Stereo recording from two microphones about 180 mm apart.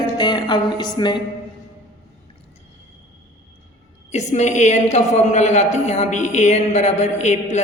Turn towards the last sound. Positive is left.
turn(degrees=40)  # may be behind; listen again after turning